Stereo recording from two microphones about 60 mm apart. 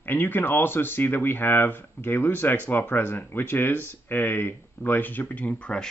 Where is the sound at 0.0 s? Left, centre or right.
Left.